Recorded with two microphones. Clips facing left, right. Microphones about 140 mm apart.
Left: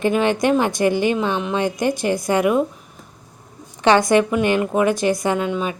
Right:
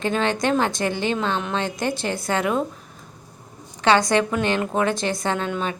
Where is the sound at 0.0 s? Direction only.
15° left (ahead or behind).